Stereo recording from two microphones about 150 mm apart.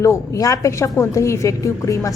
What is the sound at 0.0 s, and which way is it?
A woman's voice, 20° left (ahead or behind).